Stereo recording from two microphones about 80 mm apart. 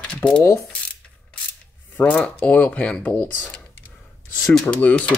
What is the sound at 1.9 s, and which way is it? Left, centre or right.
Speech, centre.